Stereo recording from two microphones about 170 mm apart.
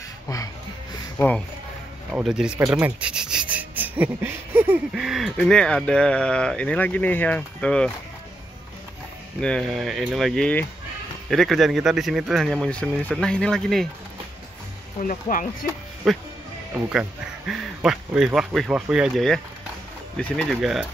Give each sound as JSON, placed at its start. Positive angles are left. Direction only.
{"t": 1.1, "sound": "speech", "side_deg": 10}
{"t": 2.0, "sound": "speech", "side_deg": 0}
{"t": 9.4, "sound": "speech", "side_deg": 5}
{"t": 15.0, "sound": "speech", "side_deg": 50}
{"t": 16.0, "sound": "speech", "side_deg": 0}